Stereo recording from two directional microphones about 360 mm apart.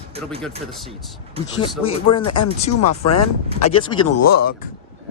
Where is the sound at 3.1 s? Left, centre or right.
Left.